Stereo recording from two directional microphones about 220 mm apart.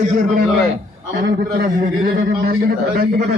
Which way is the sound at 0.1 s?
40° right (ahead or behind).